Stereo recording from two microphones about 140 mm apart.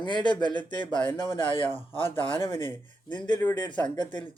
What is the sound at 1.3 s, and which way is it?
Speech, 40° left (ahead or behind).